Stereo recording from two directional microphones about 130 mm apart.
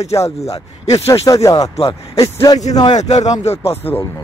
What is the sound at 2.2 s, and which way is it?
Speech, 30° left (ahead or behind).